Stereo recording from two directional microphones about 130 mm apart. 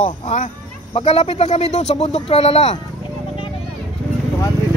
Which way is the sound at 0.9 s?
50° left (ahead or behind).